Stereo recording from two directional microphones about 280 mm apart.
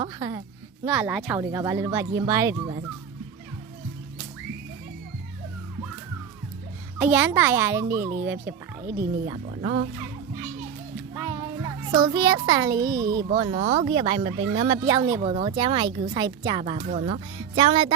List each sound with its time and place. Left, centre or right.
0.0 s speech: centre
7.0 s speech: centre
9.3 s speech: right
11.1 s a child's voice: centre